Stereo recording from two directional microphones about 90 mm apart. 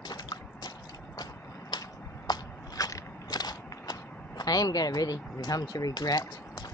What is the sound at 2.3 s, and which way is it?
Biting, 50° left (ahead or behind).